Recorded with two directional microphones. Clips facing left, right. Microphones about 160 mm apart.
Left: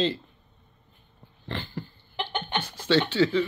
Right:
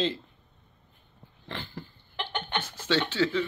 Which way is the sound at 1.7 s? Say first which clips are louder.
Left 4 dB; 10° left (ahead or behind).